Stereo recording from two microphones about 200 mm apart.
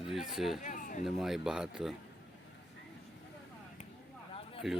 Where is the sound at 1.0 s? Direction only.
Centre (ahead or behind).